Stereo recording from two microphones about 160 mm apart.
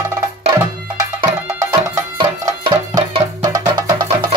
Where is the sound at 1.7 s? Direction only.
25° right (ahead or behind).